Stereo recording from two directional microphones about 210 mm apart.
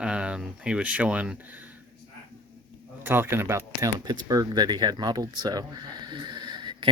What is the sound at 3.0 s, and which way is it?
Speech, 10° right (ahead or behind).